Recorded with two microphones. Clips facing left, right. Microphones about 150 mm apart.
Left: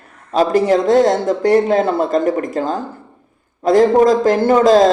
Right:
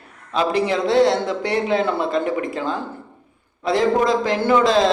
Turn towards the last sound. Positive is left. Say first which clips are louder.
# left 6 dB
turn(degrees=45)  # may be behind; listen again after turning